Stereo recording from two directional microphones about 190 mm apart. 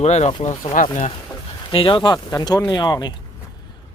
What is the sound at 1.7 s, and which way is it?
Speech, 25° left (ahead or behind).